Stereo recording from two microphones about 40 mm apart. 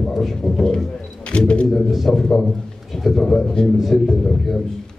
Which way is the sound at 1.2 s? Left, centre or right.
Left.